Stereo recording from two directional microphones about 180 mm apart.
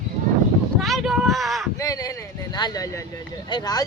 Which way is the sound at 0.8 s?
Centre (ahead or behind).